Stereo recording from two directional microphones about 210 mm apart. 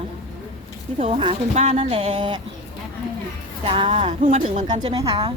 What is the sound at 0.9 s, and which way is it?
Speech, 30° right (ahead or behind).